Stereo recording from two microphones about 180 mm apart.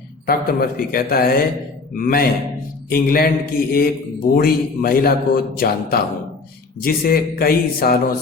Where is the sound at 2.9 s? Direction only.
55° left (ahead or behind).